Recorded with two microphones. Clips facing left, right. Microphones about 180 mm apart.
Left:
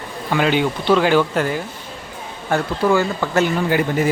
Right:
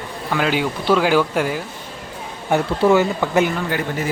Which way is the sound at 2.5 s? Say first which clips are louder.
Right 2 dB; 25° right (ahead or behind).